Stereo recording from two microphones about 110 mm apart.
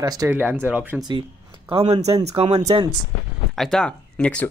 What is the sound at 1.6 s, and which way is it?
Speech, 60° right (ahead or behind).